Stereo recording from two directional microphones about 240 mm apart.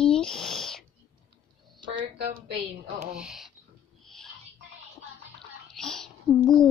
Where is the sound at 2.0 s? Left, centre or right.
Right.